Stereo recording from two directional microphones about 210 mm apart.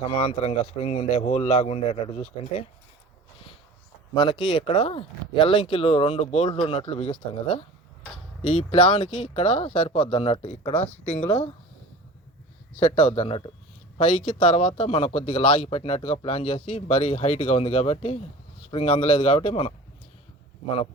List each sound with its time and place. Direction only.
0.2 s speech: 30° left (ahead or behind)
4.1 s speech: 20° left (ahead or behind)
12.8 s speech: 30° left (ahead or behind)